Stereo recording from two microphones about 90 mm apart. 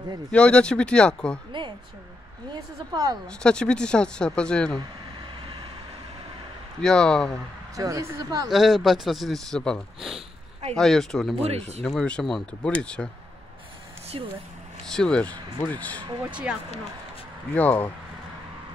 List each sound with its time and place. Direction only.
0.3 s speech: 10° left (ahead or behind)
2.9 s a woman's voice: 45° right (ahead or behind)
3.3 s speech: 10° left (ahead or behind)
6.8 s speech: 5° left (ahead or behind)
7.7 s a woman's voice: 40° right (ahead or behind)
8.5 s speech: 5° right (ahead or behind); by 13.1 s 10° left (ahead or behind)
14.1 s speech: 70° right (ahead or behind)
14.9 s speech: 10° left (ahead or behind)
16.3 s speech: 15° right (ahead or behind)
17.6 s speech: 20° left (ahead or behind)